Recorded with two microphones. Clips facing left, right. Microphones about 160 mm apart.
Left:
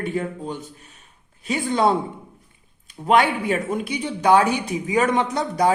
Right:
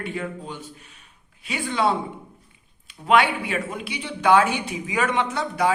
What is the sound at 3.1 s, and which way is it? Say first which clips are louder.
A woman's voice: left 2 dB; 40° left (ahead or behind).